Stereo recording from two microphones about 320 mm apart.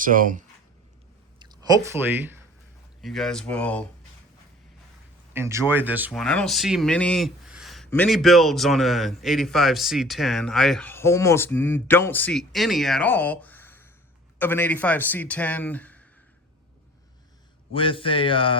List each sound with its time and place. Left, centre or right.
0.0 s speech: right
1.4 s a sound: centre
3.0 s speech: centre
5.3 s speech: centre
17.7 s speech: centre